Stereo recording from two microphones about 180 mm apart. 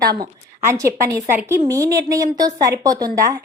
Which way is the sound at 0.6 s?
15° right (ahead or behind).